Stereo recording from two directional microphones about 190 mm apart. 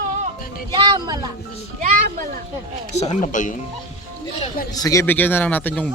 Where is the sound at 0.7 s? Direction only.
25° right (ahead or behind).